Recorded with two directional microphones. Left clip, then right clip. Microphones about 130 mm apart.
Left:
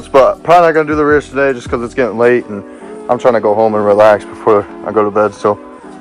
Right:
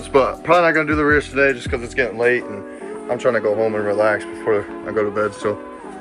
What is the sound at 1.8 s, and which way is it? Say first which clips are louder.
Speech: left 7 dB; 55° left (ahead or behind).